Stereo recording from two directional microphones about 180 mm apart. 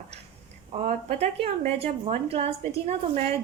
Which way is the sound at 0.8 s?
35° right (ahead or behind).